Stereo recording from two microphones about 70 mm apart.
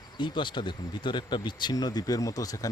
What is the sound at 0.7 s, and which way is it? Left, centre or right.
Speech, left.